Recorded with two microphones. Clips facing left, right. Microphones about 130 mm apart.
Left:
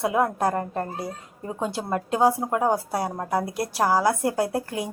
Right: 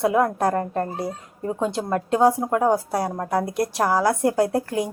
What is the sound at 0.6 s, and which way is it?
Speech, 40° right (ahead or behind).